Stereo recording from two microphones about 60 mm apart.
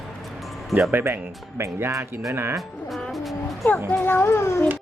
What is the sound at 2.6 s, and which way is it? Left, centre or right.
Speech, centre.